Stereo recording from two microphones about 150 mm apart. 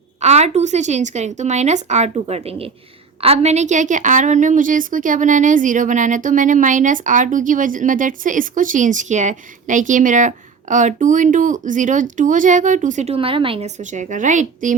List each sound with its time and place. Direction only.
0.2 s a woman's voice: 45° right (ahead or behind)
13.1 s speech: 35° right (ahead or behind)
13.7 s a woman's voice: 55° right (ahead or behind)